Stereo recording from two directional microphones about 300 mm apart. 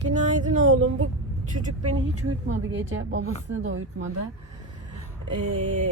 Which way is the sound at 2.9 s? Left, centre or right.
Right.